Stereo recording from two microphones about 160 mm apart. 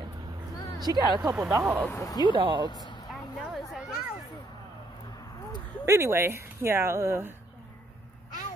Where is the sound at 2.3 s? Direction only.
30° right (ahead or behind).